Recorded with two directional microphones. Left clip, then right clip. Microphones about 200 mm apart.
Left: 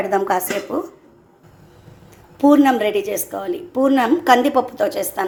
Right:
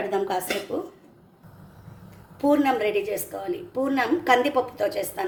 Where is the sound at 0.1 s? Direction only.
20° left (ahead or behind).